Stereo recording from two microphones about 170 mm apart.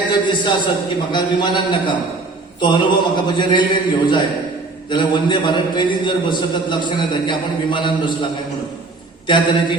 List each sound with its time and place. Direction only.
0.1 s a man's voice: 25° left (ahead or behind)
9.2 s a man's voice: 30° left (ahead or behind)